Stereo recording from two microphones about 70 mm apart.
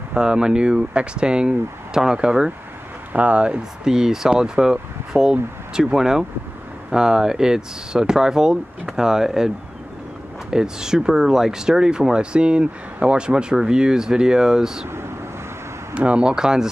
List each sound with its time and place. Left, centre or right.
0.1 s speech: centre
10.5 s speech: centre
14.9 s vehicle: right
15.9 s speech: centre